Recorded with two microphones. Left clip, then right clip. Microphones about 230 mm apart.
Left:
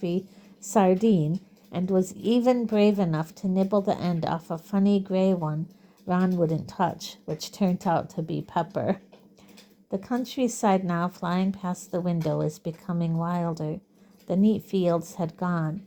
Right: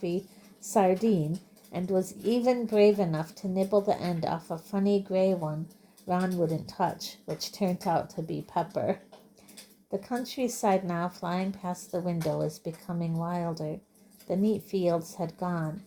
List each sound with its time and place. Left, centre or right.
0.6 s a woman's voice: left